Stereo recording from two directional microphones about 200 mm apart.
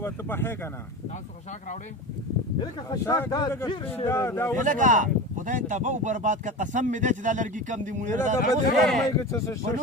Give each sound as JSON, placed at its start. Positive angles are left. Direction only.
{"t": 0.0, "sound": "a man's voice", "side_deg": 10}
{"t": 2.6, "sound": "a man's voice", "side_deg": 20}
{"t": 4.5, "sound": "speech", "side_deg": -40}
{"t": 8.7, "sound": "speech", "side_deg": 0}
{"t": 9.1, "sound": "a man's voice", "side_deg": 15}